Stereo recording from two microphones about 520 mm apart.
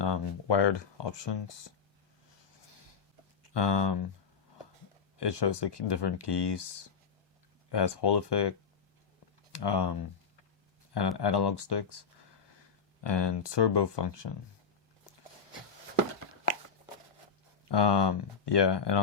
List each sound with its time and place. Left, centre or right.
0.0 s speech: left
3.5 s speech: left
5.1 s speech: left
11.2 s speech: left
17.7 s speech: left